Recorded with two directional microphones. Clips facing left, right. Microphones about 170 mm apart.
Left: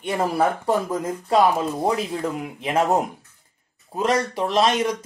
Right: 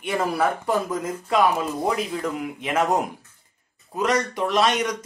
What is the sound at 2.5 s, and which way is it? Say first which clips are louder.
Speech: left 3 dB; 30° left (ahead or behind).